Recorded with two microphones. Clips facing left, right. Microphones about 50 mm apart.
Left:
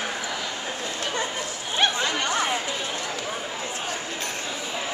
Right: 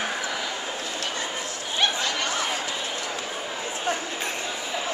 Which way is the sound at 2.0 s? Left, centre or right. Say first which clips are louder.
Left 2 dB; left.